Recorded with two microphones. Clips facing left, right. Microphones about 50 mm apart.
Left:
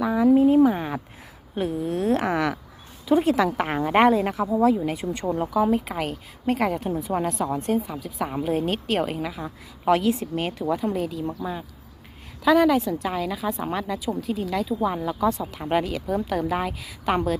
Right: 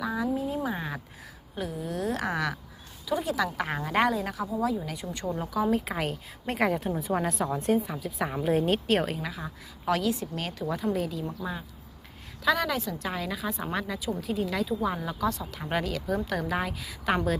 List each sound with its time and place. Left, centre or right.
0.0 s a sound: left
0.3 s a sound: left
0.6 s a sound: left
1.5 s a woman's voice: left
2.2 s a woman's voice: left
3.1 s a woman's voice: left
5.7 s a woman's voice: centre
9.8 s a woman's voice: left
10.9 s a woman's voice: centre
15.3 s a woman's voice: left
15.5 s a woman's voice: centre